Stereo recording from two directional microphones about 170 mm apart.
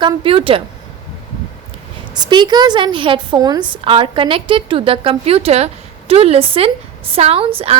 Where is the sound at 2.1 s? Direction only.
25° right (ahead or behind).